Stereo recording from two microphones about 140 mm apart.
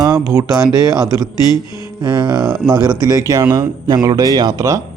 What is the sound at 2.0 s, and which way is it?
Music, 30° right (ahead or behind).